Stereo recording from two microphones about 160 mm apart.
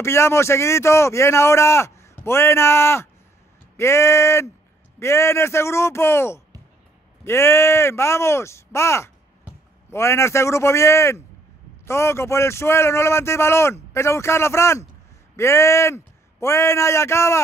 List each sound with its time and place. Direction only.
0.0 s a man's voice: 15° left (ahead or behind)